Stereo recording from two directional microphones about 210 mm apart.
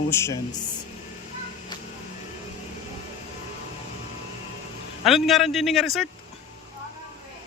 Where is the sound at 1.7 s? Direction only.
20° left (ahead or behind).